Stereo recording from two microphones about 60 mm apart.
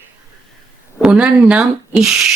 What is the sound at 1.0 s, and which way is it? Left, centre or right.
Speech, centre.